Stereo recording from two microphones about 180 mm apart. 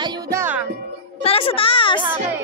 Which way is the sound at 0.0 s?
20° right (ahead or behind).